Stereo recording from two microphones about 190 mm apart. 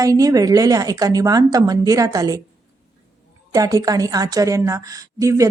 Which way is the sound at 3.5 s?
15° right (ahead or behind).